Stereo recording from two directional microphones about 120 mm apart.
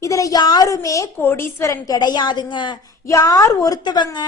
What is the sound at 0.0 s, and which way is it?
A woman's voice, 30° left (ahead or behind).